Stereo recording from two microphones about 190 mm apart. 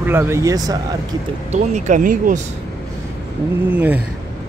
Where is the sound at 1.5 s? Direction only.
40° right (ahead or behind).